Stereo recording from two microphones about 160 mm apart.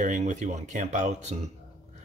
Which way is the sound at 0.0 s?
50° right (ahead or behind).